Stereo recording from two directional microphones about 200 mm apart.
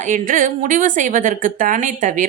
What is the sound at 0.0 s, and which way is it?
A woman's voice, 40° right (ahead or behind).